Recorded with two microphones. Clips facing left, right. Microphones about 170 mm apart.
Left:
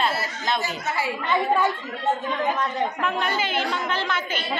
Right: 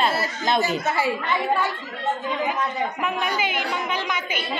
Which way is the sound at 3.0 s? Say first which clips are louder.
Even; 15° right (ahead or behind).